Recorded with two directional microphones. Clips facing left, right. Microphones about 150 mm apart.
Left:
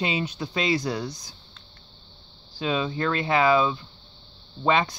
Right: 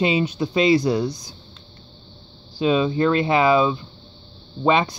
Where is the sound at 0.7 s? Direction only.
30° right (ahead or behind).